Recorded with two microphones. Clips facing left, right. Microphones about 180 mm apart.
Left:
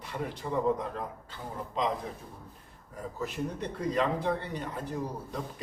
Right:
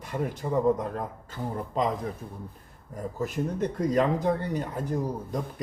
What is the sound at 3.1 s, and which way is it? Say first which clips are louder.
A man's voice: right 5 dB; 45° right (ahead or behind).